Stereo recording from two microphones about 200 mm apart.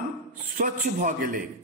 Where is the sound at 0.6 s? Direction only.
40° right (ahead or behind).